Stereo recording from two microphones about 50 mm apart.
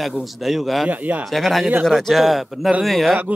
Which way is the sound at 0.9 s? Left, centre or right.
Right.